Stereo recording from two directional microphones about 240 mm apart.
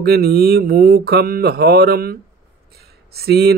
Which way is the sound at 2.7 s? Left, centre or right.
Right.